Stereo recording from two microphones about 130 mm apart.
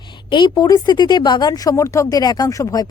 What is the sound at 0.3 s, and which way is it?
Speech, 35° left (ahead or behind).